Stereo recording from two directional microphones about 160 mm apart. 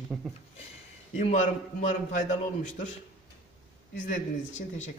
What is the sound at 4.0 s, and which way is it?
Speech, 50° left (ahead or behind).